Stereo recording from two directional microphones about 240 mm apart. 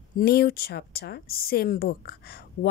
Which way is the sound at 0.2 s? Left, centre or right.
Left.